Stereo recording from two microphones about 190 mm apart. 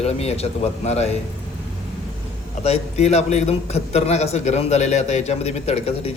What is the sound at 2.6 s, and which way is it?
A man's voice, 35° left (ahead or behind).